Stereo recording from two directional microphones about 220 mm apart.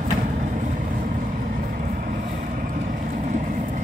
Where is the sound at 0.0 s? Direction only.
35° right (ahead or behind).